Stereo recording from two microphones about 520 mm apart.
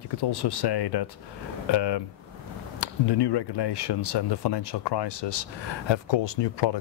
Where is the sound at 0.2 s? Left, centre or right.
Left.